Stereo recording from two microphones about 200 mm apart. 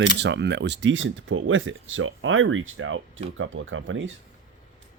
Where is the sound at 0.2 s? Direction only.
60° right (ahead or behind).